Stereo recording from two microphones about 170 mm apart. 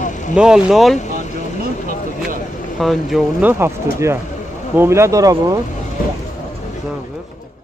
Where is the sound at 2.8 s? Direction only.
Centre (ahead or behind).